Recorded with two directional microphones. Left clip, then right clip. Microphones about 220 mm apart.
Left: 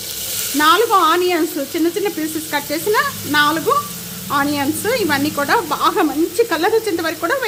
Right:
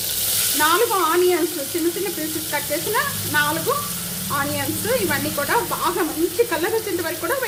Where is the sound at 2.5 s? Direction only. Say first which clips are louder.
Left 5 dB; 55° left (ahead or behind).